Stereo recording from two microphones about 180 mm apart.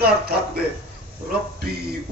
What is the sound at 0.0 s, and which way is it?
Speech, 60° right (ahead or behind).